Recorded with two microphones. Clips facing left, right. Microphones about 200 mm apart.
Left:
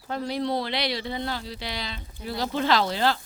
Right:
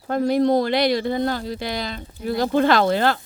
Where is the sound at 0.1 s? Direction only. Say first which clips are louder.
Right 9 dB; 50° right (ahead or behind).